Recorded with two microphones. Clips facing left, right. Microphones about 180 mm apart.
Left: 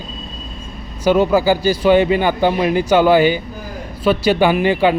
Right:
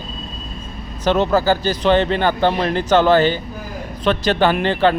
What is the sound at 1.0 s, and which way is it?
Speech, 10° left (ahead or behind).